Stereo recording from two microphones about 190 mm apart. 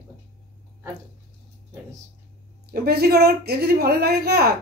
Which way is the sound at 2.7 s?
55° right (ahead or behind).